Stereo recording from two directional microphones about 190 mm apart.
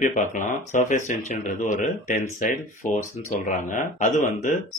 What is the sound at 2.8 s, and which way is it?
Speech, 40° left (ahead or behind).